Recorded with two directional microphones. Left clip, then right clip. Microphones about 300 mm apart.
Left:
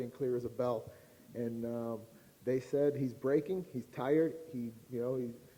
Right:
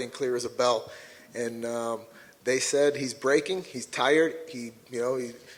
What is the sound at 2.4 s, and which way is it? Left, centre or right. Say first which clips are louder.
A man's voice: right 8 dB; centre.